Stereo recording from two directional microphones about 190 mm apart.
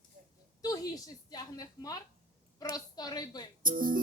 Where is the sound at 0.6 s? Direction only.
20° left (ahead or behind).